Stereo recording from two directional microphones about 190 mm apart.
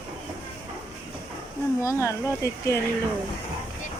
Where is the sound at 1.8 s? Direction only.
15° left (ahead or behind).